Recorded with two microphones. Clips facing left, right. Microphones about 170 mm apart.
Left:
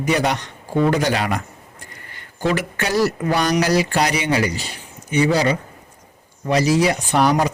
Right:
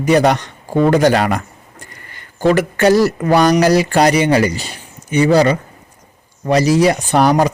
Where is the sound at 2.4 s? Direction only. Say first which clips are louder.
Right 9 dB; 45° right (ahead or behind).